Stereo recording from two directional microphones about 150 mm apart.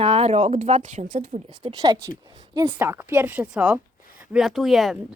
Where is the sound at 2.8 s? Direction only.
15° right (ahead or behind).